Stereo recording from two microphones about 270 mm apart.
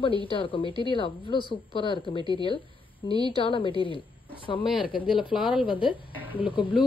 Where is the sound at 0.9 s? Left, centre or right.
Centre.